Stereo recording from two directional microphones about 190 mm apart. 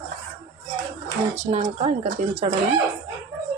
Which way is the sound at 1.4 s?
35° right (ahead or behind).